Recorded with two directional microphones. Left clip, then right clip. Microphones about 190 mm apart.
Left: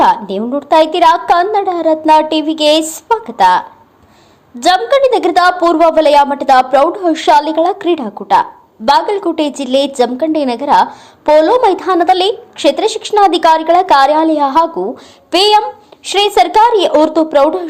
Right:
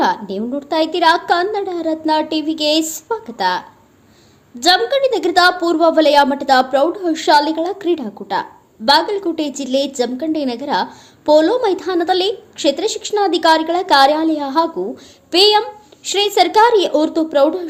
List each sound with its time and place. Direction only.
0.0 s a woman's voice: centre (ahead or behind)
4.6 s a woman's voice: 5° right (ahead or behind)